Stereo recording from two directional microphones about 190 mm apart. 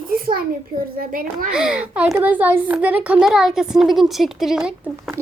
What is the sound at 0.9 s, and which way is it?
Speech, 50° right (ahead or behind).